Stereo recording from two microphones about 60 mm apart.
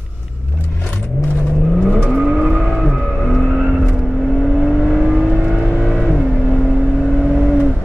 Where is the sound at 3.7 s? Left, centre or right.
Centre.